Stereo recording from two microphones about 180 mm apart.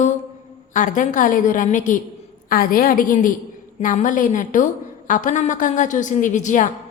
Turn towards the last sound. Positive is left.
turn(degrees=45)  # may be behind; listen again after turning